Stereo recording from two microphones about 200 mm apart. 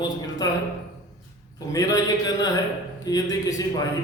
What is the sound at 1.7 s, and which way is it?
A man's voice, 15° left (ahead or behind).